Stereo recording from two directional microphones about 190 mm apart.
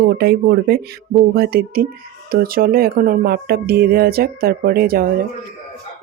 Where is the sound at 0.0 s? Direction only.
55° right (ahead or behind).